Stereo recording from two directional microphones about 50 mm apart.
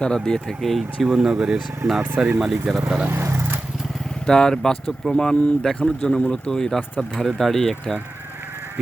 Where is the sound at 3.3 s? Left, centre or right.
Right.